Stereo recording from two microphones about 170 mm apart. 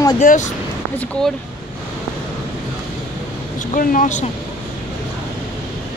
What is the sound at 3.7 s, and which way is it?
Speech, 50° left (ahead or behind).